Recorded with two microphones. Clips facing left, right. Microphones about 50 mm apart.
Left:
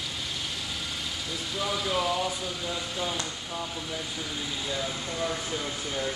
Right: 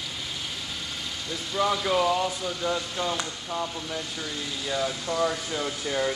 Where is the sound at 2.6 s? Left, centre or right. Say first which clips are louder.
Right 7 dB; right.